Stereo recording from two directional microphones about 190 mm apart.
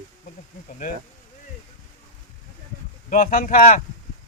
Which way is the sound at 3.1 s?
45° left (ahead or behind).